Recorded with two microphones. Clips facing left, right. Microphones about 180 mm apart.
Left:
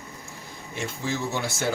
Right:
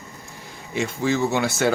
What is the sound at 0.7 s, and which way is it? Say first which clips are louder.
Speech: right 8 dB; 85° right.